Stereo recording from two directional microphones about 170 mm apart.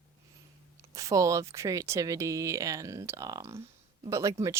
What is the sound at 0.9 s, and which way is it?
Speech, 20° right (ahead or behind).